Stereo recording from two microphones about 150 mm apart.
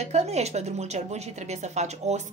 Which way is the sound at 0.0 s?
50° right (ahead or behind).